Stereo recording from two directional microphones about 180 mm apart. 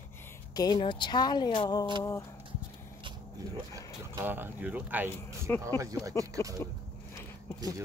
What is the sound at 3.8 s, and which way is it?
Speech, 15° right (ahead or behind).